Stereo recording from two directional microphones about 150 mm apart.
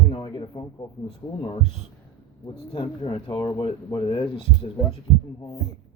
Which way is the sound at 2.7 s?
35° left (ahead or behind).